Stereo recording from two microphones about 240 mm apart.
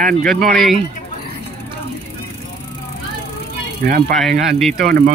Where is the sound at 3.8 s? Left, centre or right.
Right.